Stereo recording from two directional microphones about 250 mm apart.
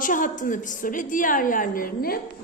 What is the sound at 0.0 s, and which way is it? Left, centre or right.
A woman's voice, left.